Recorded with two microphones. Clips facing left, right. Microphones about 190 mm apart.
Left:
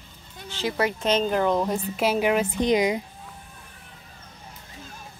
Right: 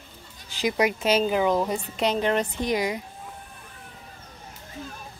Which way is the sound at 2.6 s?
20° left (ahead or behind).